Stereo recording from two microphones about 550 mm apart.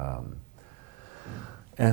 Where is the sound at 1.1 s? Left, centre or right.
Right.